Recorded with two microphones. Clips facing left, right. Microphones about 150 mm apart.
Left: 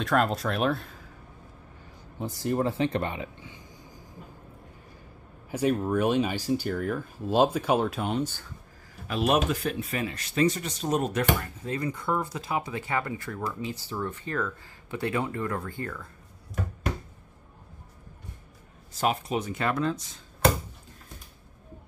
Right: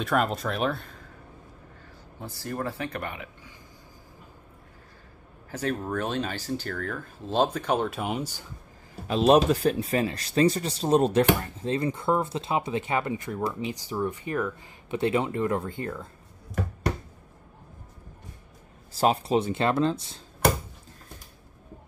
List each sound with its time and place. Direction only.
0.0 s speech: centre (ahead or behind)
2.1 s speech: 20° left (ahead or behind)
5.5 s speech: 10° left (ahead or behind); by 8.5 s 10° right (ahead or behind)
9.0 s speech: 30° right (ahead or behind)
18.9 s speech: 30° right (ahead or behind)